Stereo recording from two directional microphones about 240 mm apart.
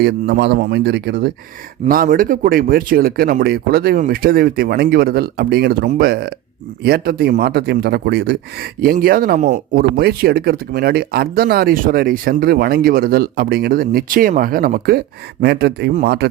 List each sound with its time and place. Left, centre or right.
0.0 s a man's voice: right